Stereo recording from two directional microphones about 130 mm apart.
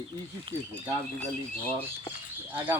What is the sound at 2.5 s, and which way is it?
Speech, 15° right (ahead or behind).